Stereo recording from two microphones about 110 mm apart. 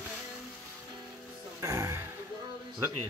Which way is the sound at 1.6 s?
30° right (ahead or behind).